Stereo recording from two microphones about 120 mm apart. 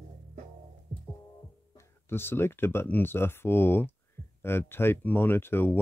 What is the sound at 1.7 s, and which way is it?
Speech, 20° left (ahead or behind).